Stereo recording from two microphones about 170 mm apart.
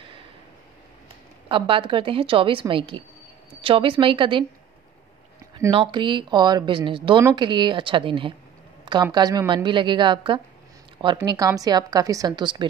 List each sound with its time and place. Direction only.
1.5 s a woman's voice: 30° right (ahead or behind)
5.7 s speech: 30° right (ahead or behind)